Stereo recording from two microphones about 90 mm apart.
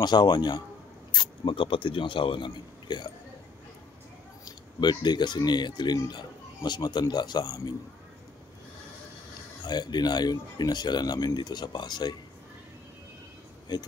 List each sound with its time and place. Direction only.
0.0 s speech: 55° left (ahead or behind)
4.5 s speech: 55° left (ahead or behind)
9.7 s speech: 50° left (ahead or behind)